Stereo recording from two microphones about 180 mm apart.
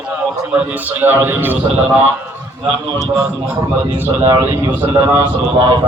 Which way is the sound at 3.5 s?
15° right (ahead or behind).